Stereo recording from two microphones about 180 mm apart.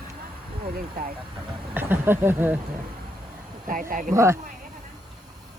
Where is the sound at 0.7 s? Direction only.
50° right (ahead or behind).